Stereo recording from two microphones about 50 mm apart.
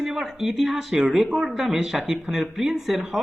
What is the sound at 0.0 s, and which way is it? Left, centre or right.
Speech, centre.